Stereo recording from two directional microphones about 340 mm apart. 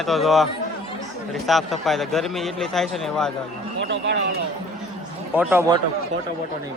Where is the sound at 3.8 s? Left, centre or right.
Right.